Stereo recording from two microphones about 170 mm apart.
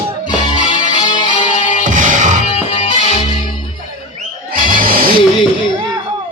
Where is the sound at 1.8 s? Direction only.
50° right (ahead or behind).